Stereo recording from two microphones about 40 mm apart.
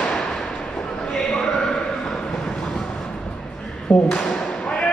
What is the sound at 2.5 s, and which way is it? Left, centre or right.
Vehicle, centre.